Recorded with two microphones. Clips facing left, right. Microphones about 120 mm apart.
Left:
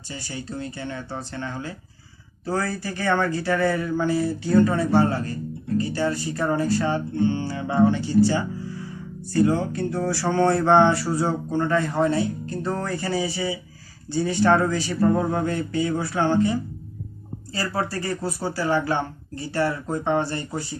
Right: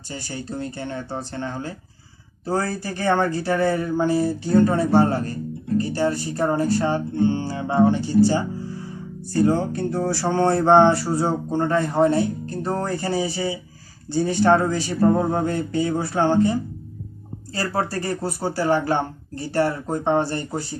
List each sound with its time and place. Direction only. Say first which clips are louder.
0.3 s speech: right 2 dB; 40° right (ahead or behind)
17.7 s speech: right 2 dB; 40° right (ahead or behind)